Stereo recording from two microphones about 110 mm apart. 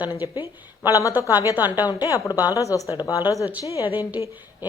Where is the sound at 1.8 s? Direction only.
35° left (ahead or behind).